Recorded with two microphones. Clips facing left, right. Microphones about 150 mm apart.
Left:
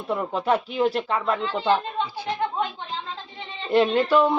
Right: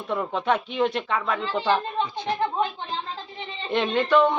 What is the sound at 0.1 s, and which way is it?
Speech, 10° left (ahead or behind).